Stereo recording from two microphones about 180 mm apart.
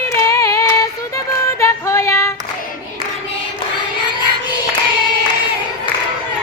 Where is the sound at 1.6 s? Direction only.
15° left (ahead or behind).